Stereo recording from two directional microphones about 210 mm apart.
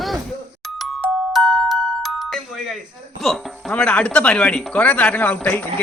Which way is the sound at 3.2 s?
Centre (ahead or behind).